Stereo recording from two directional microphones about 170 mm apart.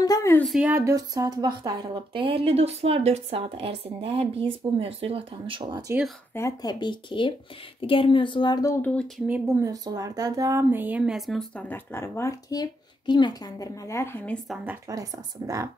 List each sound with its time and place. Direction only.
0.0 s a woman's voice: 20° left (ahead or behind)
0.5 s speech: 10° right (ahead or behind)
0.8 s speech: 20° right (ahead or behind)
6.3 s a woman's voice: 20° left (ahead or behind)
9.3 s speech: 15° right (ahead or behind); by 14.6 s 5° left (ahead or behind)
14.6 s speech: 15° right (ahead or behind)